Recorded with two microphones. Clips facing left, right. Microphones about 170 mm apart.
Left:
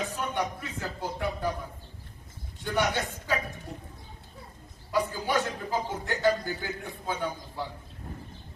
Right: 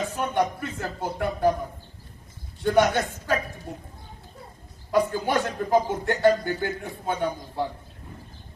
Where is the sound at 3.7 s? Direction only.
55° right (ahead or behind).